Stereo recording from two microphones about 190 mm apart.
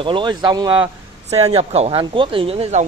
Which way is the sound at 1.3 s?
35° right (ahead or behind).